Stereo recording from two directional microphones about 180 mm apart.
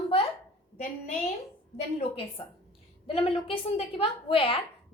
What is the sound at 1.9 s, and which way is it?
A woman's voice, 30° left (ahead or behind).